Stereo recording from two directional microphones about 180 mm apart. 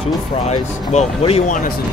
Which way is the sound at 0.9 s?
40° left (ahead or behind).